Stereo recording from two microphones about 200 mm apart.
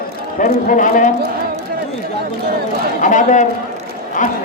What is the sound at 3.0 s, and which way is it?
Speech, 40° left (ahead or behind).